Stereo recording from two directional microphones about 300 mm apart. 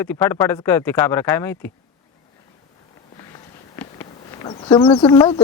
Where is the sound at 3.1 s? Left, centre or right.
Centre.